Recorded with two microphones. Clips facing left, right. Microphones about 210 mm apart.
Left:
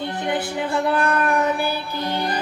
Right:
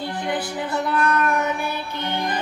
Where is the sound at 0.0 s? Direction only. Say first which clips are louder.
Left 2 dB; 20° left (ahead or behind).